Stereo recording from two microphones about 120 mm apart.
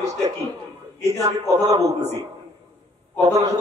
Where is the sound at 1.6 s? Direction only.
65° right (ahead or behind).